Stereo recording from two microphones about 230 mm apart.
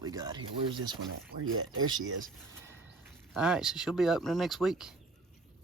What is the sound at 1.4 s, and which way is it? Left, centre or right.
Speech, right.